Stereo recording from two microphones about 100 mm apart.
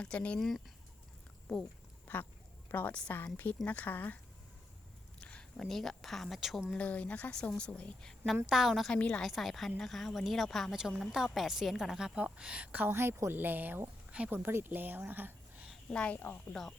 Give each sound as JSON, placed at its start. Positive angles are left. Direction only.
{"t": 0.0, "sound": "a woman's voice", "side_deg": 10}
{"t": 2.1, "sound": "a woman's voice", "side_deg": 15}
{"t": 5.2, "sound": "speech", "side_deg": 10}
{"t": 6.7, "sound": "a woman's voice", "side_deg": 15}
{"t": 8.4, "sound": "a woman's voice", "side_deg": -5}
{"t": 15.9, "sound": "a woman's voice", "side_deg": 10}